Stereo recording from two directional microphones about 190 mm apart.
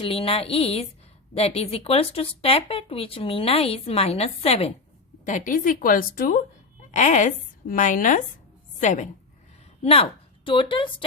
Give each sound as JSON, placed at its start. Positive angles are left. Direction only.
{"t": 0.0, "sound": "a woman's voice", "side_deg": 30}
{"t": 9.8, "sound": "a woman's voice", "side_deg": 30}